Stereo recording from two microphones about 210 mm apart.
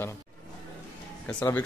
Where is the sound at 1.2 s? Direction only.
5° left (ahead or behind).